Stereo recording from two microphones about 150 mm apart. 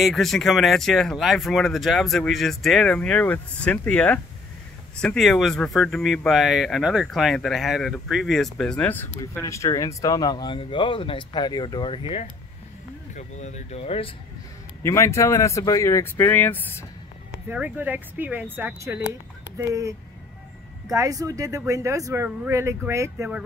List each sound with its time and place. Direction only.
0.0 s speech: centre (ahead or behind); by 12.3 s 40° left (ahead or behind)
13.1 s speech: 50° left (ahead or behind)
14.8 s speech: 20° left (ahead or behind)
17.5 s speech: 10° right (ahead or behind)
20.9 s speech: 25° right (ahead or behind)